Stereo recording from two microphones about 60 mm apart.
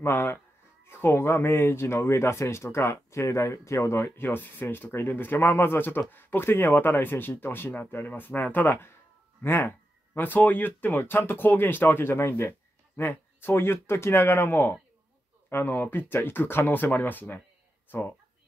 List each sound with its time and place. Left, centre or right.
0.0 s speech: left